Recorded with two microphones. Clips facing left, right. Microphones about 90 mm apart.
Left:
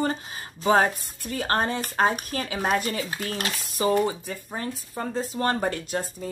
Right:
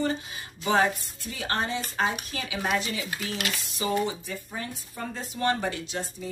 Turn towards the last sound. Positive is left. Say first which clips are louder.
# left 4 dB
turn(degrees=45)  # may be behind; listen again after turning